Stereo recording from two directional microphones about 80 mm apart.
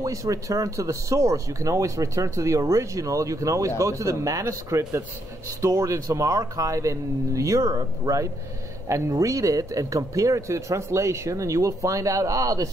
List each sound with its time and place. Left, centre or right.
0.0 s speech: right